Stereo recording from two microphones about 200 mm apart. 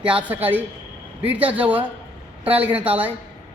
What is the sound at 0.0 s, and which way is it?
A man's voice, 5° right (ahead or behind).